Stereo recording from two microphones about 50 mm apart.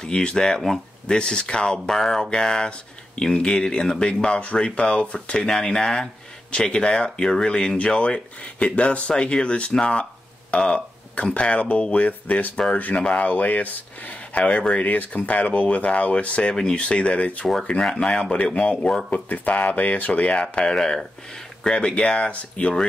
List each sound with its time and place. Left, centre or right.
0.0 s speech: centre
17.6 s speech: centre
19.0 s speech: left
20.5 s speech: centre